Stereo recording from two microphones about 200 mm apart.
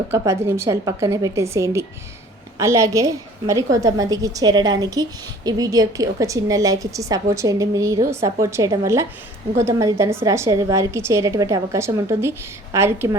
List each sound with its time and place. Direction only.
0.1 s a woman's voice: 15° right (ahead or behind)